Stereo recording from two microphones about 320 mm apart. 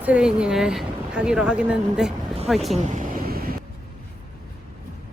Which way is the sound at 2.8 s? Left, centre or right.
Right.